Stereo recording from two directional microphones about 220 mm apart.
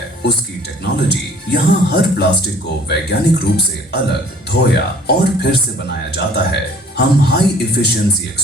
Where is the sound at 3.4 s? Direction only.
50° left (ahead or behind).